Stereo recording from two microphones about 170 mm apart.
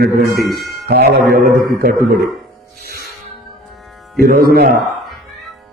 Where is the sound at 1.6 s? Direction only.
60° right (ahead or behind).